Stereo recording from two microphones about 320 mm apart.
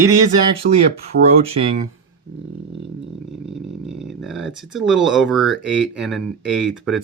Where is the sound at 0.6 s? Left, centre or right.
Right.